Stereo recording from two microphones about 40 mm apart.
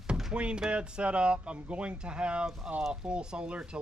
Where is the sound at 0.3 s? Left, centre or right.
Right.